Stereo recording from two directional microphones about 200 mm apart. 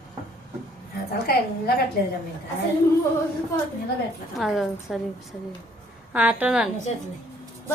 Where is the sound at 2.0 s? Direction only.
55° left (ahead or behind).